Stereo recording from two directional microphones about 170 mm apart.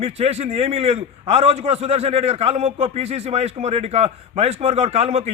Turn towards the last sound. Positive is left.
turn(degrees=-40)  # may be behind; listen again after turning